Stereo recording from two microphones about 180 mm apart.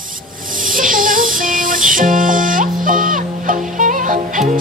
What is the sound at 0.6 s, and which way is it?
Music, 50° right (ahead or behind).